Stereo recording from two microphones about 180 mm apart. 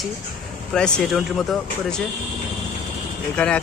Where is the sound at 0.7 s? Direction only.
5° left (ahead or behind).